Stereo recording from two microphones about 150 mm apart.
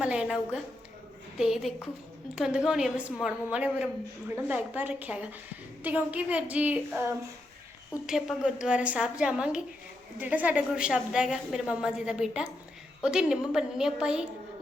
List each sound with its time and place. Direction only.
0.0 s a sound: 5° right (ahead or behind)
1.4 s a woman's voice: 5° right (ahead or behind)
8.0 s a woman's voice: 5° right (ahead or behind)